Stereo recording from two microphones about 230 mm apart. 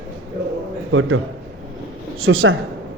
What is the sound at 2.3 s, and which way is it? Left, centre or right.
Speech, right.